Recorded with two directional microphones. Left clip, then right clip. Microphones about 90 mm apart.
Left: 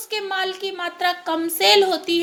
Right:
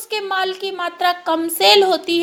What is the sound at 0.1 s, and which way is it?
A child's voice, 30° right (ahead or behind).